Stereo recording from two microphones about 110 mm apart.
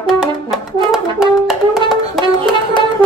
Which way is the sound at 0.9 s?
5° right (ahead or behind).